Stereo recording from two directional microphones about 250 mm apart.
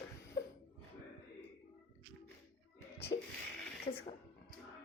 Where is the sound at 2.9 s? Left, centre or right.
Left.